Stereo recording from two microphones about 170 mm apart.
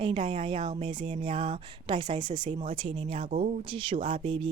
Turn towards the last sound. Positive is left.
turn(degrees=-30)  # may be behind; listen again after turning